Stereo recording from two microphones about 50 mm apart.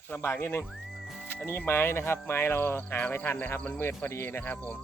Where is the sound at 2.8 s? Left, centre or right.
Left.